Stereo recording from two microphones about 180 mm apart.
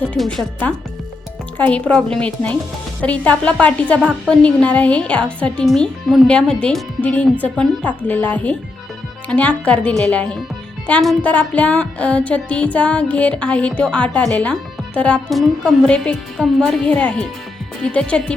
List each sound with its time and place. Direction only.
0.0 s speech: 5° left (ahead or behind)
1.5 s music: 5° left (ahead or behind)
17.8 s speech: 5° left (ahead or behind)